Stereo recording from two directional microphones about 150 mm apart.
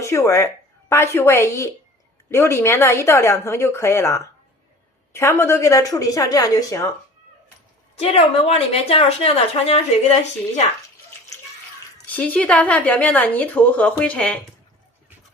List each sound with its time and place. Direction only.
0.0 s a woman's voice: 20° left (ahead or behind)
7.9 s a woman's voice: 45° left (ahead or behind)
12.0 s a woman's voice: 10° left (ahead or behind)